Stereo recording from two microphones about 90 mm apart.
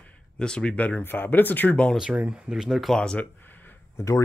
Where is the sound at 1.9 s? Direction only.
10° right (ahead or behind); by 3.2 s 10° left (ahead or behind).